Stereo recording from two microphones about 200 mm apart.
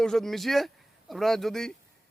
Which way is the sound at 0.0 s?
Centre (ahead or behind).